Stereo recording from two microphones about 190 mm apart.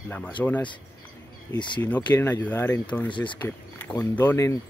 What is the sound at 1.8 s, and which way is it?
Speech, 10° left (ahead or behind).